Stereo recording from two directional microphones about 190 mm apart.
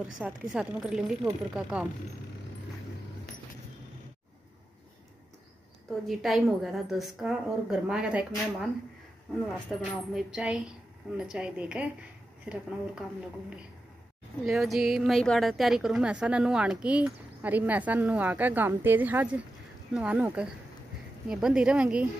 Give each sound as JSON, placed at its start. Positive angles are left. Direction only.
{"t": 0.2, "sound": "a woman's voice", "side_deg": -5}
{"t": 6.0, "sound": "a woman's voice", "side_deg": 0}
{"t": 9.3, "sound": "a woman's voice", "side_deg": 0}
{"t": 14.4, "sound": "a woman's voice", "side_deg": 0}